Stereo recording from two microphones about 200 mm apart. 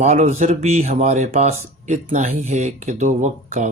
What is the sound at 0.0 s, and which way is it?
Speech, 35° right (ahead or behind).